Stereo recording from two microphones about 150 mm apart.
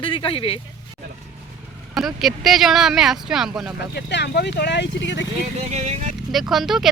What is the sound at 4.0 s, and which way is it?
Speech, 90° left.